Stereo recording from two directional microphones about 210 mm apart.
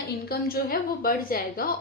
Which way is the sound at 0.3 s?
45° left (ahead or behind).